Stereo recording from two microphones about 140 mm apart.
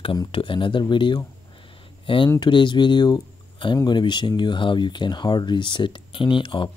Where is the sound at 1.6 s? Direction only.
40° left (ahead or behind).